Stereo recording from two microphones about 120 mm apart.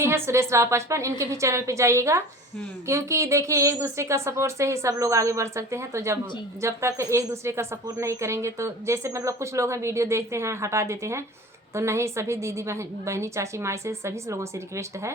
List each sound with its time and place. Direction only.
0.0 s a woman's voice: 20° right (ahead or behind)